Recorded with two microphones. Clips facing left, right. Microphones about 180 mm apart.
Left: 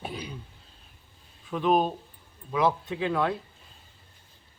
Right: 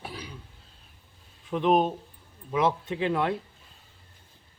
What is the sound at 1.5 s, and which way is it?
Speech, 20° right (ahead or behind).